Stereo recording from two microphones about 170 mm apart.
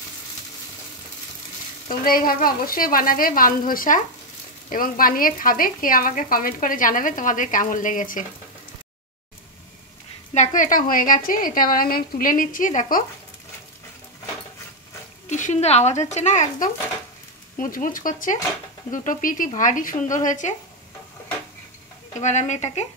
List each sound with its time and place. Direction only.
1.9 s a woman's voice: 55° left (ahead or behind)
10.3 s a woman's voice: 50° left (ahead or behind)
15.2 s speech: 45° left (ahead or behind)
22.2 s speech: 45° left (ahead or behind)